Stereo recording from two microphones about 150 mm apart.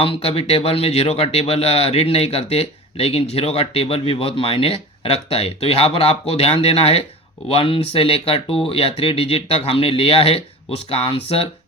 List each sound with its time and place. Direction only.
0.0 s speech: 40° left (ahead or behind)